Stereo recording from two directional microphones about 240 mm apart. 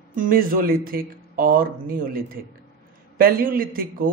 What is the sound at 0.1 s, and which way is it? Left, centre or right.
Speech, right.